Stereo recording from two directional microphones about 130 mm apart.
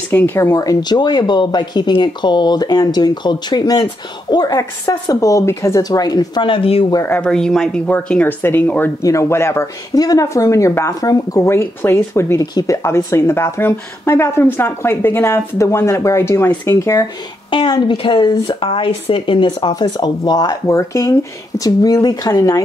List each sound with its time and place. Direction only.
0.1 s speech: 15° left (ahead or behind); by 6.9 s 45° left (ahead or behind)
6.9 s speech: 25° left (ahead or behind)
7.2 s speech: 5° left (ahead or behind); by 17.1 s 25° left (ahead or behind)
17.5 s speech: 40° left (ahead or behind)